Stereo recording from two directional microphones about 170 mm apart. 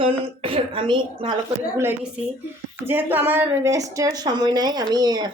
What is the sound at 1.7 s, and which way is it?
A woman's voice, 10° right (ahead or behind).